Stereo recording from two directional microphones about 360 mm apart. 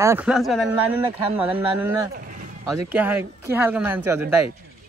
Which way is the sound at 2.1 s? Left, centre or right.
Right.